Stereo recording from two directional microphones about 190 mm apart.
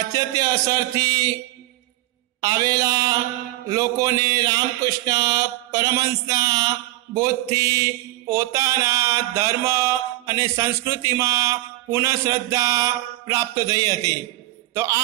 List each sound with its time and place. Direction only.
0.1 s mantra: 20° right (ahead or behind)
2.4 s mantra: 20° right (ahead or behind)
14.7 s a man's voice: 15° right (ahead or behind)